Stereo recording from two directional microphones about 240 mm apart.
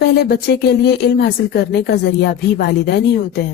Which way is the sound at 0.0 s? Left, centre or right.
Left.